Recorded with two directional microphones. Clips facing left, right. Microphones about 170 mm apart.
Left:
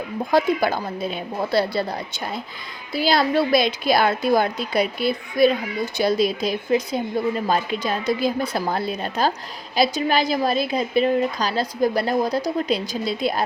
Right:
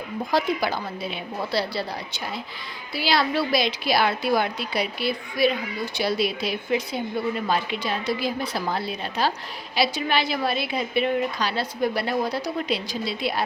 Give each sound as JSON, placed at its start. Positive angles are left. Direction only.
{"t": 0.3, "sound": "a woman's voice", "side_deg": 50}